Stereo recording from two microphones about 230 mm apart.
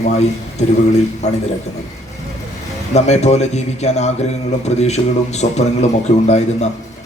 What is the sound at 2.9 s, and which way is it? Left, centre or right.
A man's voice, left.